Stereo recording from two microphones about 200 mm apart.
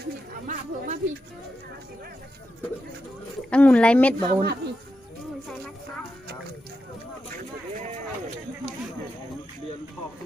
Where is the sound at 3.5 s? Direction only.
5° left (ahead or behind).